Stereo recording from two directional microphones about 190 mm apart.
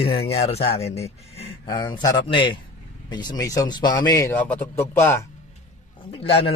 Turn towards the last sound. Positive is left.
turn(degrees=30)  # may be behind; listen again after turning